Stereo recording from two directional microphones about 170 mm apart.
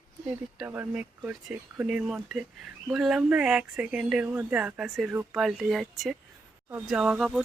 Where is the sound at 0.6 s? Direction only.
10° right (ahead or behind).